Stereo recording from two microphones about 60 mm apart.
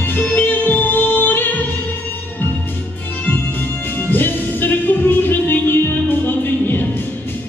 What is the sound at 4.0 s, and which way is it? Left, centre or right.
Music, left.